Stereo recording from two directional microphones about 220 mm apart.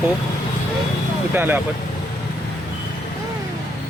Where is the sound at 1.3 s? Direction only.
10° right (ahead or behind).